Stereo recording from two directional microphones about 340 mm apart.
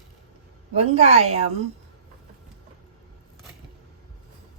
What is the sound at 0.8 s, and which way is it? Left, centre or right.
Speech, centre.